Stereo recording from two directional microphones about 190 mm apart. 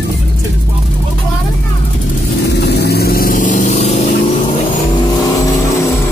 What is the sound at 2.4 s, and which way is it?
Vehicle, 60° left (ahead or behind).